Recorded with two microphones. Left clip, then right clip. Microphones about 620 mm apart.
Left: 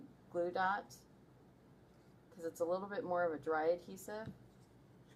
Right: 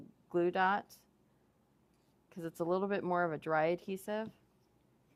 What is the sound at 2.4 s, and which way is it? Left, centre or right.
Speech, right.